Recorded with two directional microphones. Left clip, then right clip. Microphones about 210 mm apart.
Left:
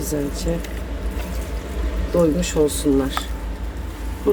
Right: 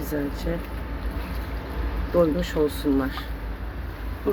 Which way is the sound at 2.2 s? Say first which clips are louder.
Left 4 dB; 5° left (ahead or behind).